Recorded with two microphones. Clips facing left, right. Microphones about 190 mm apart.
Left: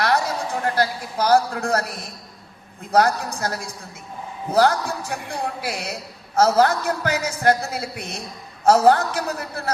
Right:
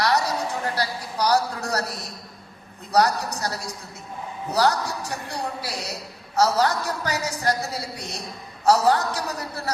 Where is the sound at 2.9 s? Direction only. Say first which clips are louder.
Left 2 dB; 50° left (ahead or behind).